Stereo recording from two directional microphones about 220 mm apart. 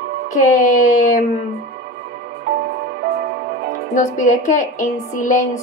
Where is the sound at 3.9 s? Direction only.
35° left (ahead or behind).